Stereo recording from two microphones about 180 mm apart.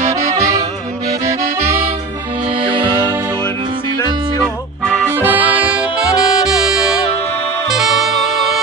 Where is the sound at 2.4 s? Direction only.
30° right (ahead or behind).